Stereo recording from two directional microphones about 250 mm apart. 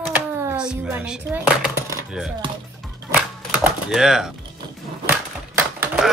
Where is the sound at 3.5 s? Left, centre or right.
Centre.